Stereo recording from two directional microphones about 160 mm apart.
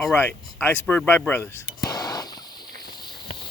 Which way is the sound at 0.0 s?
10° left (ahead or behind).